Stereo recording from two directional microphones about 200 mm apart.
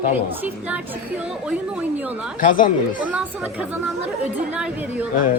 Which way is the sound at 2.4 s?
40° left (ahead or behind).